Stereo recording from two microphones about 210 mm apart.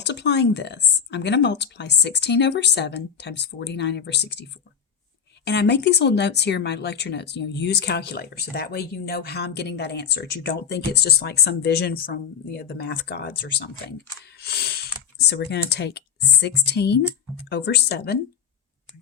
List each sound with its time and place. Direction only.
0.0 s speech: 55° left (ahead or behind)
5.5 s speech: 55° left (ahead or behind)